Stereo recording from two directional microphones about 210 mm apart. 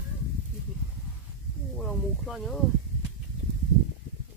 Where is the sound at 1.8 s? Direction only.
Centre (ahead or behind).